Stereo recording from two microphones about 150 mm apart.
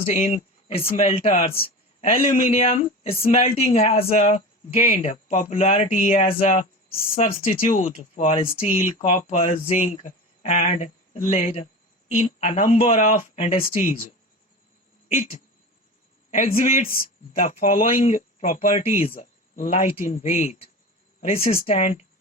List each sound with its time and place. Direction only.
0.1 s speech: 50° left (ahead or behind)
1.6 s a sound: 40° left (ahead or behind)
2.3 s speech: 45° left (ahead or behind)
7.7 s speech: 60° left (ahead or behind); by 13.6 s 45° left (ahead or behind)
16.3 s speech: 65° left (ahead or behind)
17.7 s speech: 55° left (ahead or behind)
18.9 s speech: 65° left (ahead or behind); by 20.7 s 50° left (ahead or behind)
21.3 s speech: 75° left (ahead or behind)
21.8 s speech: 45° left (ahead or behind)